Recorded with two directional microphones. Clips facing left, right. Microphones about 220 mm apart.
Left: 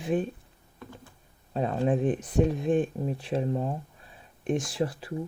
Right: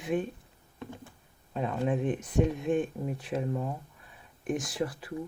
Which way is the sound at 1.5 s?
35° left (ahead or behind).